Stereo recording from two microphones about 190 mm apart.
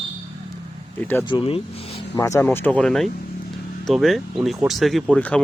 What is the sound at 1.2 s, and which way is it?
Speech, 25° left (ahead or behind).